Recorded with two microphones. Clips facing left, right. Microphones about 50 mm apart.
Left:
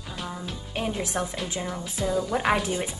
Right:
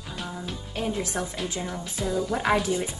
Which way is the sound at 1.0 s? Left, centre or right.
Left.